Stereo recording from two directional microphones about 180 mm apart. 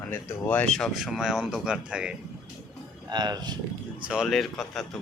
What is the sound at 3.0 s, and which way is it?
Speech, 25° right (ahead or behind).